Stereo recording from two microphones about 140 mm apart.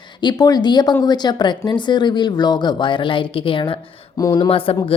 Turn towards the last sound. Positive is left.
turn(degrees=40)  # may be behind; listen again after turning